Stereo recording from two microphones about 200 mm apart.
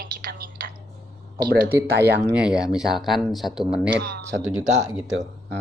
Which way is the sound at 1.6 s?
10° right (ahead or behind).